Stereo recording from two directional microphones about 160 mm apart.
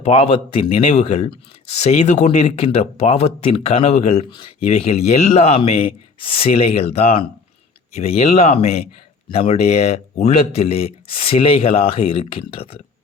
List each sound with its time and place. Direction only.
0.0 s speech: 35° left (ahead or behind)
4.3 s speech: 30° left (ahead or behind)
4.7 s speech: 40° left (ahead or behind)